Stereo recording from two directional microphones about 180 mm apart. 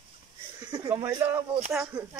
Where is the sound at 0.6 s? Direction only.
20° right (ahead or behind).